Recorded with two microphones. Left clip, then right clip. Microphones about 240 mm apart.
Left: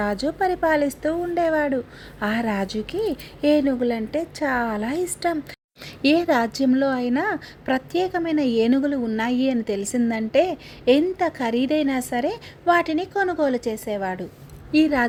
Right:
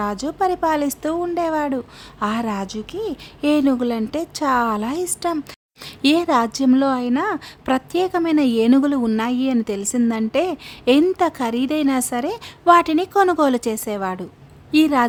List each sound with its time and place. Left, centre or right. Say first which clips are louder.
0.0 s a woman's voice: right 2 dB; centre